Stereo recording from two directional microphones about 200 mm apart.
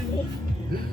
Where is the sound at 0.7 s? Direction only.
45° right (ahead or behind).